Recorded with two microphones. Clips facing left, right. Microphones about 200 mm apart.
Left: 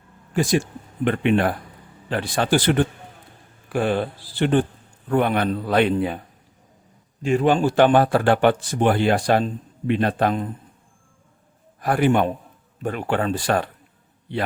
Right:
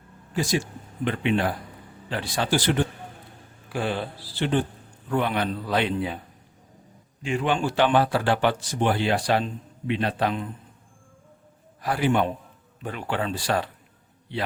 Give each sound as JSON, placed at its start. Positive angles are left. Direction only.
{"t": 1.0, "sound": "speech", "side_deg": 55}
{"t": 7.2, "sound": "speech", "side_deg": 40}
{"t": 11.8, "sound": "speech", "side_deg": 55}